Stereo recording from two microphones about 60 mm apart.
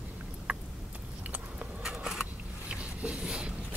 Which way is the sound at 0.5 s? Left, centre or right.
Right.